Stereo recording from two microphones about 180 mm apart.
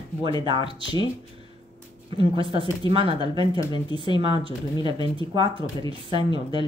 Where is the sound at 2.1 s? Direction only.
30° right (ahead or behind).